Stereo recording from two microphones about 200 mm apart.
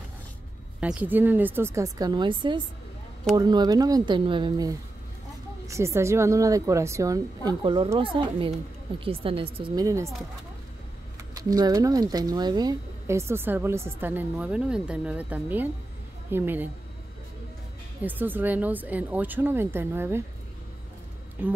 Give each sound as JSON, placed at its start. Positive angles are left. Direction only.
{"t": 0.7, "sound": "speech", "side_deg": -5}
{"t": 9.8, "sound": "speech", "side_deg": -15}
{"t": 11.3, "sound": "speech", "side_deg": -20}
{"t": 18.0, "sound": "speech", "side_deg": -10}
{"t": 21.4, "sound": "speech", "side_deg": -10}